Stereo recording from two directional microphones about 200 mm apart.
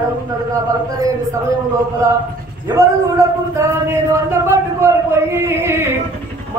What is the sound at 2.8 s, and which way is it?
Speech, 15° right (ahead or behind).